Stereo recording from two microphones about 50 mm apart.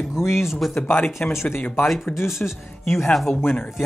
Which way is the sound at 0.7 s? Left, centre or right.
Left.